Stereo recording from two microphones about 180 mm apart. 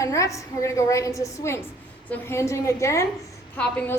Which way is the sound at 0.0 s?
15° left (ahead or behind).